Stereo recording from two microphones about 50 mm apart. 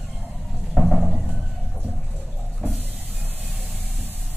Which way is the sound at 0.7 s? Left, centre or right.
Centre.